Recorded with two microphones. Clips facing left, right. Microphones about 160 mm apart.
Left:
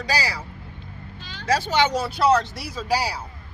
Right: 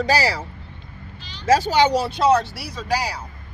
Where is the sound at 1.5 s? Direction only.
40° right (ahead or behind).